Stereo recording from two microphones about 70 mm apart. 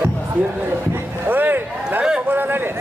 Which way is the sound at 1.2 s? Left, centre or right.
Right.